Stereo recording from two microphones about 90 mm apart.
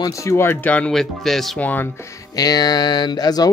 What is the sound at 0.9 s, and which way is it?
Speech, 5° left (ahead or behind).